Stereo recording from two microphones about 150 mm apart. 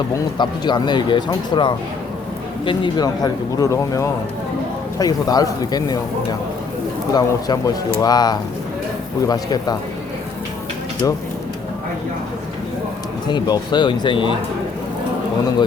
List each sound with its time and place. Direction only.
0.1 s speech: 30° left (ahead or behind)
7.1 s speech: 25° left (ahead or behind)
11.0 s speech: 25° left (ahead or behind)
13.2 s speech: 30° left (ahead or behind)